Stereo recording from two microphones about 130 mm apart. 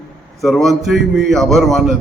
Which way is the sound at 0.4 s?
Centre (ahead or behind).